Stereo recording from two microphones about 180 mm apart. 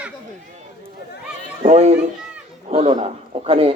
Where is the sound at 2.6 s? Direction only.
35° right (ahead or behind).